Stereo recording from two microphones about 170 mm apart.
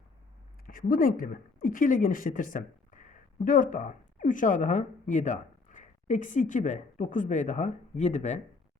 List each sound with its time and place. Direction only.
0.7 s a woman's voice: 55° left (ahead or behind)